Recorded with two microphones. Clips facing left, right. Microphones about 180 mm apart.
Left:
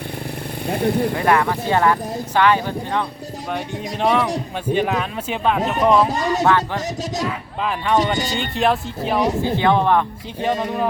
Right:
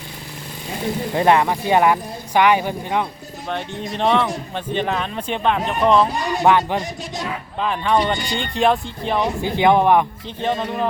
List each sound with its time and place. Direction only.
0.7 s speech: 60° left (ahead or behind)
1.1 s speech: 20° right (ahead or behind)
3.5 s speech: 5° left (ahead or behind)
6.4 s speech: 15° right (ahead or behind)
7.6 s speech: 5° left (ahead or behind)
9.4 s speech: 15° right (ahead or behind)
10.4 s speech: 10° left (ahead or behind)